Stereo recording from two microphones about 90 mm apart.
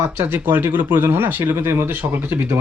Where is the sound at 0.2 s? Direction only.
20° right (ahead or behind).